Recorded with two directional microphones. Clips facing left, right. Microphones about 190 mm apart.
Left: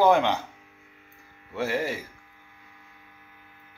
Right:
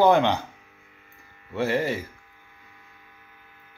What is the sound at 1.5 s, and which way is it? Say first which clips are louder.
Speech: right 3 dB; 5° left (ahead or behind).